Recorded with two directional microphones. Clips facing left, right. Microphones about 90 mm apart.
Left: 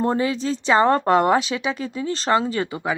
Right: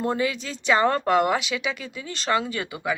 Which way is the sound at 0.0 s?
35° left (ahead or behind).